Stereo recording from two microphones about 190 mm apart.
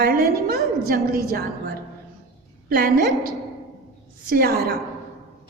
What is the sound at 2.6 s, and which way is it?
Speech, 50° right (ahead or behind).